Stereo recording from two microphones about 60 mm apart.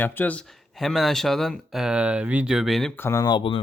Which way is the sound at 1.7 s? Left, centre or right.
Centre.